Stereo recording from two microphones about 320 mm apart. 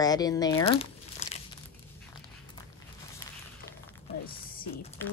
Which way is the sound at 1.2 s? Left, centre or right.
Centre.